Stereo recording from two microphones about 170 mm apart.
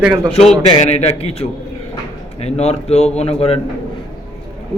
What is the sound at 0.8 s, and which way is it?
Speech, 40° left (ahead or behind).